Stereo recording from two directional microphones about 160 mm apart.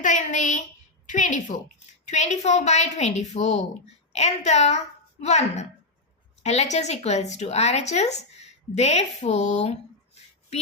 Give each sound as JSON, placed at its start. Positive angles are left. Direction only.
{"t": 0.0, "sound": "speech", "side_deg": 50}